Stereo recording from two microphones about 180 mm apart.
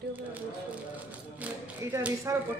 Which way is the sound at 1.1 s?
10° right (ahead or behind).